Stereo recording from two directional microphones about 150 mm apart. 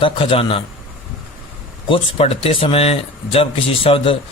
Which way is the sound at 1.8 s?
35° left (ahead or behind).